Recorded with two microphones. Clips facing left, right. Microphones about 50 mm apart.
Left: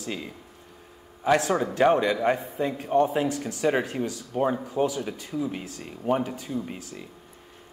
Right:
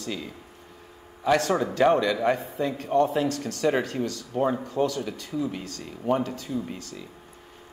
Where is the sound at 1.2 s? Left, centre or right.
Centre.